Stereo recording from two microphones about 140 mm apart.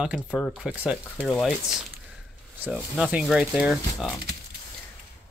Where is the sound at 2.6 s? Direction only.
5° right (ahead or behind).